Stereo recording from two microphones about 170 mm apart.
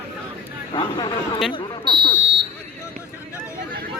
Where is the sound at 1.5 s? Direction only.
30° left (ahead or behind).